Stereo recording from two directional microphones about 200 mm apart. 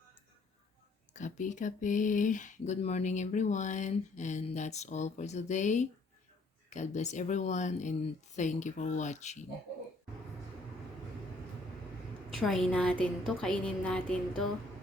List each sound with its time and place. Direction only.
1.1 s speech: 35° left (ahead or behind)
12.3 s a woman's voice: centre (ahead or behind)